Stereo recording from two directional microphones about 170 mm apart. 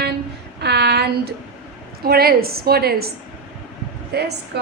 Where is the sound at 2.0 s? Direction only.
65° right (ahead or behind).